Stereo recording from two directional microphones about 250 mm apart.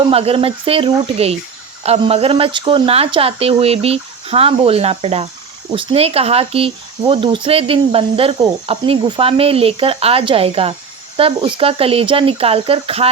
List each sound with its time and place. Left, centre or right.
0.1 s speech: right